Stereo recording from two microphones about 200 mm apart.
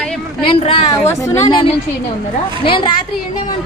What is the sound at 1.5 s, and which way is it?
A woman's voice, 25° left (ahead or behind).